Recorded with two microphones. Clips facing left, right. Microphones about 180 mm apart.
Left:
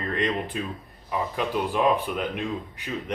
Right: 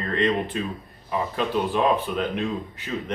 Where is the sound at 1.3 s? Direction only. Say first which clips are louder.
Right 2 dB; 15° left (ahead or behind).